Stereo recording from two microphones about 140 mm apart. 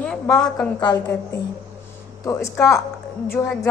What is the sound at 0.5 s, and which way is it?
Speech, 25° left (ahead or behind).